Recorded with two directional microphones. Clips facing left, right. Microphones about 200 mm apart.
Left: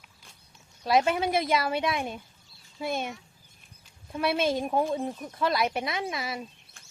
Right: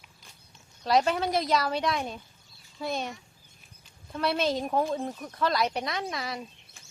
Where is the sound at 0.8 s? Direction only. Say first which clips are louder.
Left 1 dB; 5° left (ahead or behind).